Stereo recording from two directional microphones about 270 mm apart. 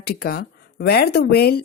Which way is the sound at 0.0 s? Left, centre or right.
Left.